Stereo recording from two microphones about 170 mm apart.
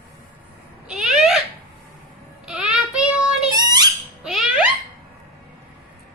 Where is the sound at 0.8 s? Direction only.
5° right (ahead or behind).